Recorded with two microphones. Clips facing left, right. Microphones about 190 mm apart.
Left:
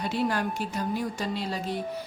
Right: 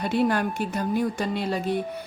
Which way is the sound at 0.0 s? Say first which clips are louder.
Right 4 dB; 55° right (ahead or behind).